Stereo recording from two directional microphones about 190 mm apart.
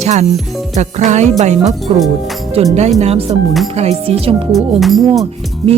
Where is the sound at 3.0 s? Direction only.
35° right (ahead or behind).